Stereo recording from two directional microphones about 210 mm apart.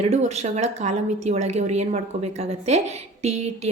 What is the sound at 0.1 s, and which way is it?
A woman's voice, 30° right (ahead or behind).